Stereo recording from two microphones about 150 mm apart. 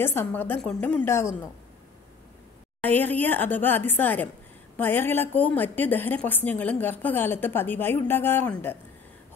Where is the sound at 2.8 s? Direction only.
10° left (ahead or behind).